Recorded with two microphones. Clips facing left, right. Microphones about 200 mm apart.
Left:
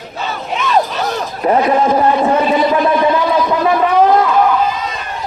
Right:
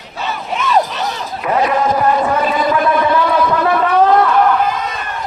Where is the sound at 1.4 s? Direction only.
35° left (ahead or behind); by 4.5 s 15° left (ahead or behind).